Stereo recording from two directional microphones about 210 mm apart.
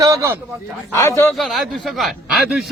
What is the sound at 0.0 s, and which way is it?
Speech, 15° right (ahead or behind).